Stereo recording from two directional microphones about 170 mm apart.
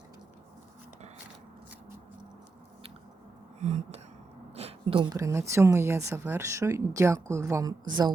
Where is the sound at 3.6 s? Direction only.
40° right (ahead or behind).